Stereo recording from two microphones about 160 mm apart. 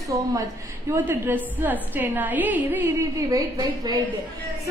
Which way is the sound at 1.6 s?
10° right (ahead or behind).